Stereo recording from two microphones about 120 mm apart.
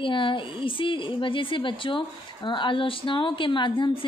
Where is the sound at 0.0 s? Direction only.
45° left (ahead or behind).